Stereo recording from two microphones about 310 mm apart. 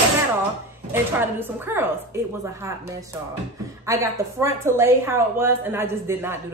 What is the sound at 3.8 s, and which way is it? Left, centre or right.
Speech, centre.